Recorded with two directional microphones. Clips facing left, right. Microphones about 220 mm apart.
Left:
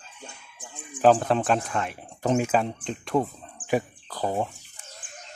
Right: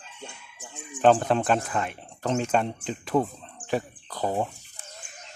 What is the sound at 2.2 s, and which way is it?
Speech, 10° left (ahead or behind).